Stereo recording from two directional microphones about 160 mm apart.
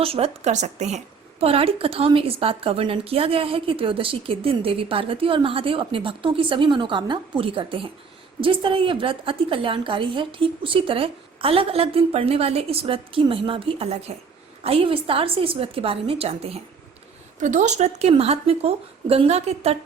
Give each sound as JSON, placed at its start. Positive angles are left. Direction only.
{"t": 0.0, "sound": "a woman's voice", "side_deg": -35}
{"t": 17.4, "sound": "a woman's voice", "side_deg": -50}